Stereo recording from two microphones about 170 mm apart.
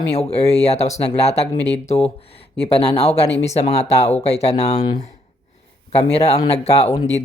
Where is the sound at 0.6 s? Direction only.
40° left (ahead or behind).